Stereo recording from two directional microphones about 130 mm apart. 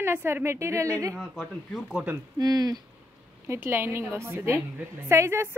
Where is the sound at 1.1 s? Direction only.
5° left (ahead or behind).